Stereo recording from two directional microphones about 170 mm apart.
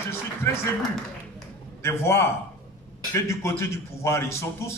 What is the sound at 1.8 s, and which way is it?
A man's voice, 15° left (ahead or behind).